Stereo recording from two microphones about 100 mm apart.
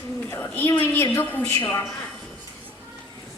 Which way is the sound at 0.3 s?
20° left (ahead or behind).